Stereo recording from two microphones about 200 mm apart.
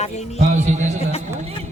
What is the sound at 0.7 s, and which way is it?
Speech, 35° right (ahead or behind).